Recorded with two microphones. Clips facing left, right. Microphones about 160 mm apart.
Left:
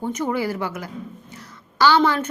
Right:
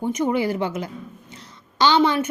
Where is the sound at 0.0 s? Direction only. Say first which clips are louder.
Right 2 dB; 15° right (ahead or behind).